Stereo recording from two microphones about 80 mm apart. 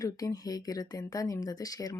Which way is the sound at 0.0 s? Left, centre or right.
Left.